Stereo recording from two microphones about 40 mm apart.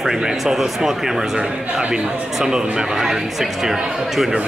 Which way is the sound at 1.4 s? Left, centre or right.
Right.